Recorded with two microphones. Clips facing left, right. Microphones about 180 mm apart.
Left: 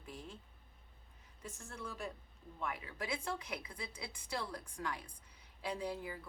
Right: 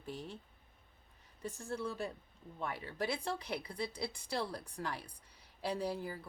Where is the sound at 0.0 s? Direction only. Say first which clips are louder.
Right 5 dB; 35° right (ahead or behind).